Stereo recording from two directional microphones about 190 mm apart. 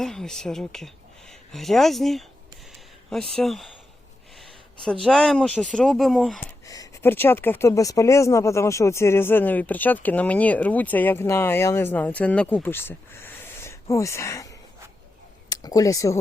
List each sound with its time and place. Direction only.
0.0 s speech: centre (ahead or behind)
4.4 s a sound: 5° left (ahead or behind)
5.0 s speech: centre (ahead or behind)
6.7 s speech: 15° left (ahead or behind)